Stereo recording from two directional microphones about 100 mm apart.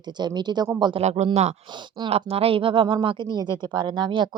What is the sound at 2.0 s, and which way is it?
Speech, 75° right (ahead or behind).